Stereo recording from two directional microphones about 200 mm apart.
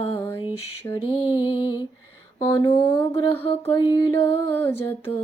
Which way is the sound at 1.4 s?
20° left (ahead or behind).